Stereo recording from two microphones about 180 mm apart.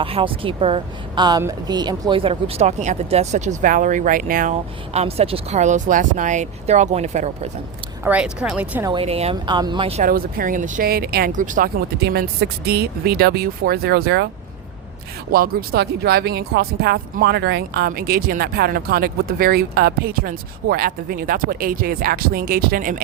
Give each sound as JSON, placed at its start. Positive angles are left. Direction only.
{"t": 0.0, "sound": "a woman's voice", "side_deg": -30}
{"t": 4.9, "sound": "a woman's voice", "side_deg": -35}
{"t": 8.0, "sound": "speech", "side_deg": -5}
{"t": 8.9, "sound": "speech", "side_deg": -30}
{"t": 10.0, "sound": "speech", "side_deg": -55}
{"t": 15.3, "sound": "speech", "side_deg": -60}